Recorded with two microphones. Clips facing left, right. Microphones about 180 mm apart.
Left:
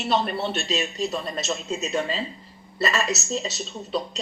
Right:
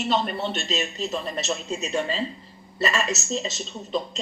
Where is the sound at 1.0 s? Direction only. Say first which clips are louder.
Left 1 dB; 10° left (ahead or behind).